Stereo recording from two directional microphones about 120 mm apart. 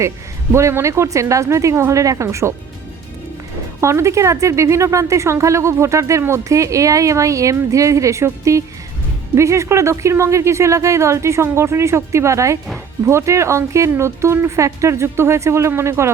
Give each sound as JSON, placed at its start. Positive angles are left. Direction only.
{"t": 0.5, "sound": "speech", "side_deg": -25}
{"t": 3.8, "sound": "speech", "side_deg": -25}